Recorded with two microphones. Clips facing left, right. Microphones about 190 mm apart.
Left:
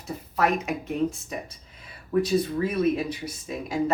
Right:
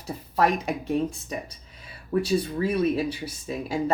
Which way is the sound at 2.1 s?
30° right (ahead or behind).